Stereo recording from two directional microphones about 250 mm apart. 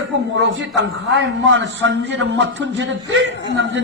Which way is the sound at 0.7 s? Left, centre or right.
Right.